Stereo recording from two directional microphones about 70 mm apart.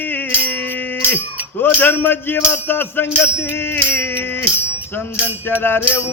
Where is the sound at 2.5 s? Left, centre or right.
Left.